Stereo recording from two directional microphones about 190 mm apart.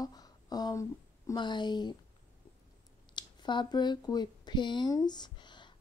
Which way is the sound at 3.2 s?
25° left (ahead or behind).